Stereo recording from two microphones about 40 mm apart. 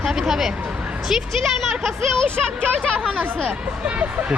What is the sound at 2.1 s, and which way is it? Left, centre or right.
Speech, centre.